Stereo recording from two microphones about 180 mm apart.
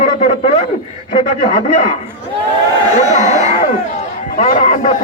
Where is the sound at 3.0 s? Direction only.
40° left (ahead or behind).